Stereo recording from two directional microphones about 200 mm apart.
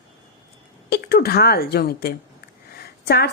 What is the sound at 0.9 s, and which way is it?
A woman's voice, 50° left (ahead or behind).